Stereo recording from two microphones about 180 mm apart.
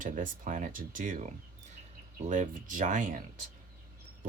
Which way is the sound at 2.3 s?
45° right (ahead or behind).